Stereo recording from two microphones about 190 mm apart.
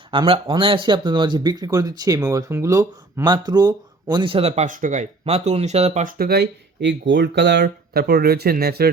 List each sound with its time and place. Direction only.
0.1 s speech: 25° right (ahead or behind); by 8.9 s 55° right (ahead or behind)